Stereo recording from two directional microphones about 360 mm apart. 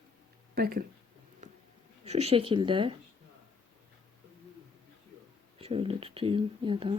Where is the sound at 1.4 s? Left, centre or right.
Centre.